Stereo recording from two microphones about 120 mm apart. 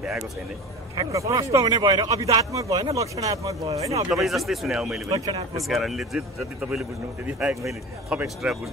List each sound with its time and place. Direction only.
0.9 s speech: 25° right (ahead or behind)
4.1 s speech: centre (ahead or behind)
5.0 s speech: 30° right (ahead or behind)
5.6 s speech: centre (ahead or behind)